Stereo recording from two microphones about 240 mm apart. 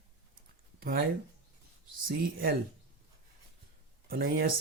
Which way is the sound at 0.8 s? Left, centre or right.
Right.